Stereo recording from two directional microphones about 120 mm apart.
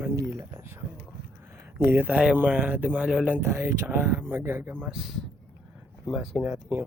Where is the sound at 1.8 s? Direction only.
15° right (ahead or behind).